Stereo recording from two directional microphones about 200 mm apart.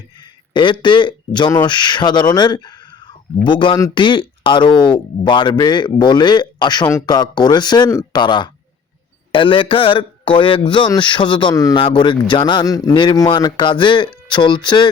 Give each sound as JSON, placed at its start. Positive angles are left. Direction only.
{"t": 0.5, "sound": "speech", "side_deg": 25}